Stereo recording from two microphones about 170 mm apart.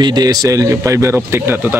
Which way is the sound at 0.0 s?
25° right (ahead or behind).